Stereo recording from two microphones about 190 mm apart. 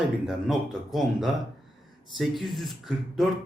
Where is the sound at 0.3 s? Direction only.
Centre (ahead or behind).